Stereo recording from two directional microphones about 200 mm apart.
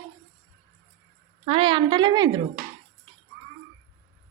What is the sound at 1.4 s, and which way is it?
Speech, 25° right (ahead or behind).